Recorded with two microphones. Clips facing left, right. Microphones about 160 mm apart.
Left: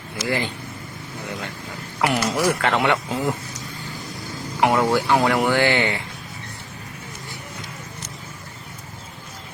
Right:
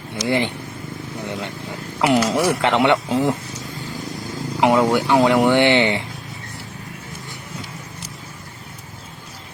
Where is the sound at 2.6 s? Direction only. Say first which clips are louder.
Right 4 dB; 20° right (ahead or behind).